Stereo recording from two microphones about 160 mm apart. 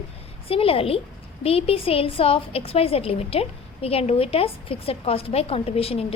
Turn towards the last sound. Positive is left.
turn(degrees=35)  # may be behind; listen again after turning